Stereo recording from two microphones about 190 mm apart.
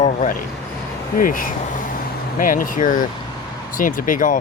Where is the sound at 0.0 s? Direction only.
35° left (ahead or behind).